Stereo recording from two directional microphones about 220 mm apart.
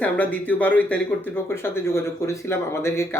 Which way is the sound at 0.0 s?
5° left (ahead or behind).